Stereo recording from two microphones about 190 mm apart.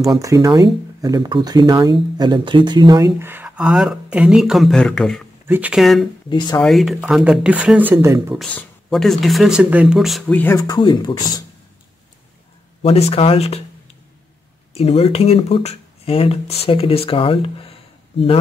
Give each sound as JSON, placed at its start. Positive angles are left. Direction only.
{"t": 0.0, "sound": "speech", "side_deg": -15}
{"t": 6.3, "sound": "speech", "side_deg": 20}
{"t": 6.6, "sound": "speech", "side_deg": 0}
{"t": 8.4, "sound": "speech", "side_deg": 0}
{"t": 12.8, "sound": "speech", "side_deg": 30}
{"t": 14.7, "sound": "speech", "side_deg": 30}